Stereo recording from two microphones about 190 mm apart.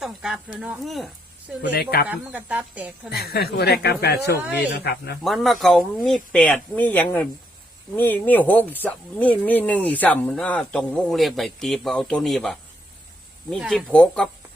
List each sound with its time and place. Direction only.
0.0 s speech: centre (ahead or behind)
1.6 s speech: 55° left (ahead or behind)
2.0 s speech: 5° right (ahead or behind)
3.1 s speech: 55° left (ahead or behind)
5.2 s speech: centre (ahead or behind)